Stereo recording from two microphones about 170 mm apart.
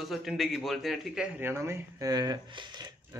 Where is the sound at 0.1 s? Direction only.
Centre (ahead or behind).